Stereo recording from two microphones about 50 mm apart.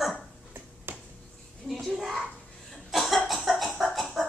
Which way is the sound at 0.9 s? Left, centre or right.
Right.